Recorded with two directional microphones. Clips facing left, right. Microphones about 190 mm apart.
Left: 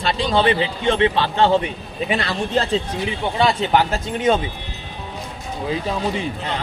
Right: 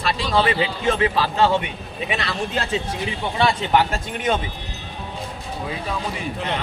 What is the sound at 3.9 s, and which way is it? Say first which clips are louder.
Speech: left 5 dB; 25° left (ahead or behind).